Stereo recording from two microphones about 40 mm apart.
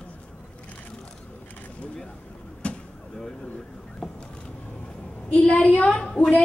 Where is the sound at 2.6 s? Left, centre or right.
Left.